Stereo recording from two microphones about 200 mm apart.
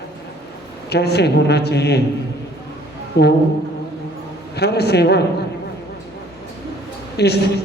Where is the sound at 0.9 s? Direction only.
55° left (ahead or behind).